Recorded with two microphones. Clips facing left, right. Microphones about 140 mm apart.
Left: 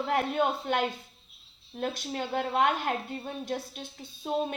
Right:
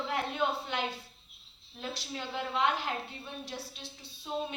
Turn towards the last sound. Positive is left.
turn(degrees=45)  # may be behind; listen again after turning